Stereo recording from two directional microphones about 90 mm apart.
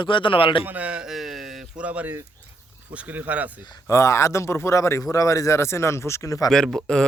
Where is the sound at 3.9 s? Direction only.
35° left (ahead or behind).